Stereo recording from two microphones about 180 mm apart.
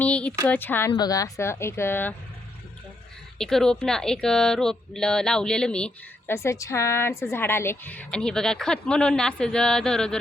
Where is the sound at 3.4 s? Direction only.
5° left (ahead or behind).